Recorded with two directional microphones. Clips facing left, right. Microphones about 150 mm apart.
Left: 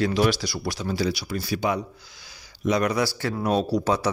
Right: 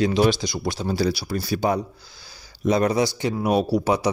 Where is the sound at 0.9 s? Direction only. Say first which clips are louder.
Right 3 dB; 35° right (ahead or behind).